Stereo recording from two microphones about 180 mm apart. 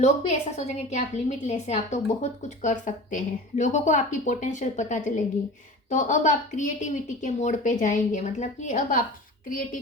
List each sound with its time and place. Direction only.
0.0 s a woman's voice: 40° left (ahead or behind)